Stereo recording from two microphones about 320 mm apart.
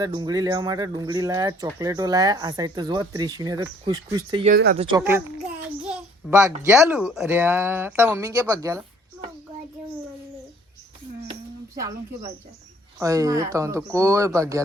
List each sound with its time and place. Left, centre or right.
0.0 s speech: centre
4.5 s speech: right
4.8 s speech: centre
11.8 s speech: centre